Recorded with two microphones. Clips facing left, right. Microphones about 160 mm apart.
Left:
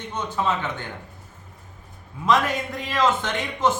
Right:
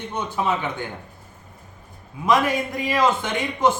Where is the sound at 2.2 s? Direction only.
10° right (ahead or behind).